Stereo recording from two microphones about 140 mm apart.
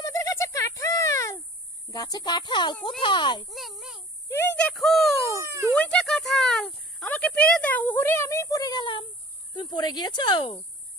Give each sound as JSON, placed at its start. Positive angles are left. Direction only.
{"t": 0.0, "sound": "a sound", "side_deg": 25}
{"t": 1.9, "sound": "speech", "side_deg": 25}
{"t": 3.4, "sound": "a sound", "side_deg": 0}
{"t": 4.6, "sound": "speech", "side_deg": 0}
{"t": 5.4, "sound": "speech", "side_deg": -20}
{"t": 5.8, "sound": "speech", "side_deg": 5}